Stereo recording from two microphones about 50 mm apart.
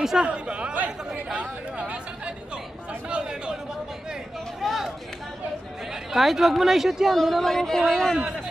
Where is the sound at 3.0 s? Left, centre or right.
Centre.